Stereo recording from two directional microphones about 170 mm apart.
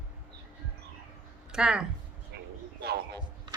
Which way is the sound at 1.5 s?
5° right (ahead or behind).